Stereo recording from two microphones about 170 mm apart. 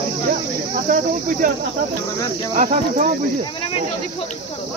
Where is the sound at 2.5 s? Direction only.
50° right (ahead or behind).